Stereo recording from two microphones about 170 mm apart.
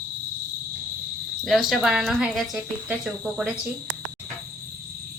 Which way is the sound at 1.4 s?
Centre (ahead or behind).